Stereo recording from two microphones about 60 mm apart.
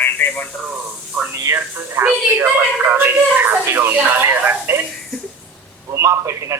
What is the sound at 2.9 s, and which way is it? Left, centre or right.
Speech, right.